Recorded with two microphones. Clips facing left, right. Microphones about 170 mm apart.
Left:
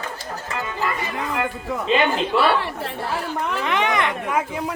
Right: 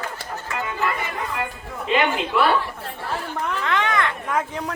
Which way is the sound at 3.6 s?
20° left (ahead or behind).